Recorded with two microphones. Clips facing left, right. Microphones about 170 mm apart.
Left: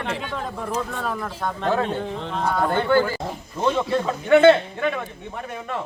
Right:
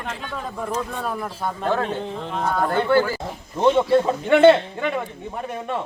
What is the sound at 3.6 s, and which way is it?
Speech, 25° right (ahead or behind).